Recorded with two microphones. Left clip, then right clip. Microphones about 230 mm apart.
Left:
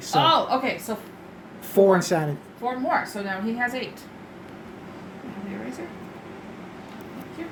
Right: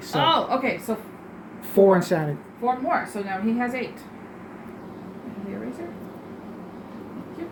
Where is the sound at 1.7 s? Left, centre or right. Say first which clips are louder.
Right 1 dB; centre.